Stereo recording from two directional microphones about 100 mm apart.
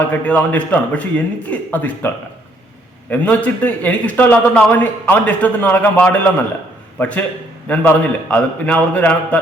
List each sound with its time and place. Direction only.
0.1 s a man's voice: 15° left (ahead or behind)
3.1 s a man's voice: 15° left (ahead or behind)